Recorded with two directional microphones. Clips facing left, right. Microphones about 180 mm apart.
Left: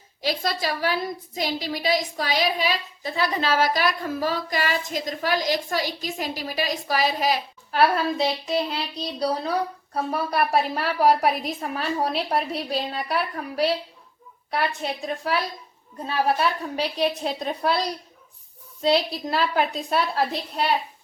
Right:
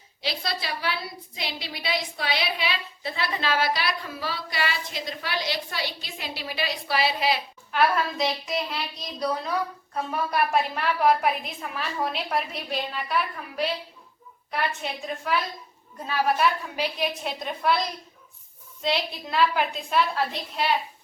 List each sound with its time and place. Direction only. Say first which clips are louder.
0.2 s a woman's voice: left 5 dB; 45° left (ahead or behind)